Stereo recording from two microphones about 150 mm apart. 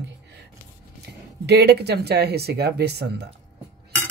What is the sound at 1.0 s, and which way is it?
Speech, 90° right.